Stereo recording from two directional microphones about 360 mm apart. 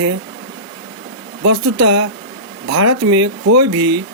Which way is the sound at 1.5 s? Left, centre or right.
Right.